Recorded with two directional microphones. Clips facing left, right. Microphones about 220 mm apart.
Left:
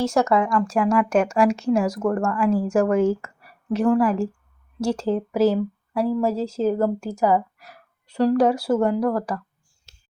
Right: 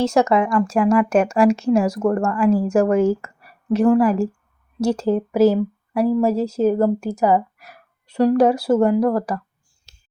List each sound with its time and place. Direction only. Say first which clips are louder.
0.0 s a woman's voice: right 3 dB; 20° right (ahead or behind)